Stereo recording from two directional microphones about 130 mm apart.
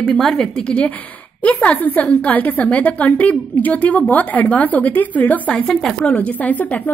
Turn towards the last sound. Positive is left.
turn(degrees=10)  # may be behind; listen again after turning